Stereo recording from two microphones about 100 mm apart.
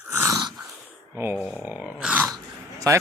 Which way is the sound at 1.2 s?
25° right (ahead or behind).